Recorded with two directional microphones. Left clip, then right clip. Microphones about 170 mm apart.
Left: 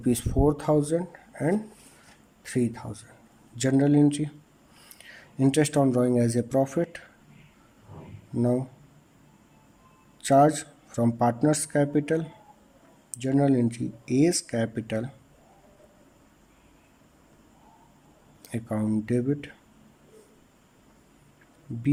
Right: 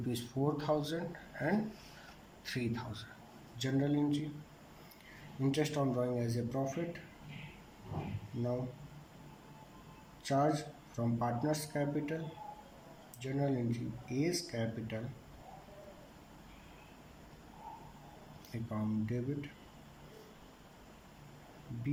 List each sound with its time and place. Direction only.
0.1 s speech: 60° left (ahead or behind)
3.6 s speech: 65° left (ahead or behind)
5.4 s speech: 75° left (ahead or behind)
10.2 s speech: 80° left
18.5 s speech: 70° left (ahead or behind)